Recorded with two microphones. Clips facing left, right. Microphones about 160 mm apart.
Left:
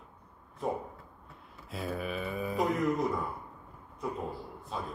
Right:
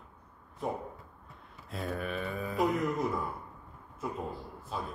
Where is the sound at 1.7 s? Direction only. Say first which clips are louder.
Even; centre (ahead or behind).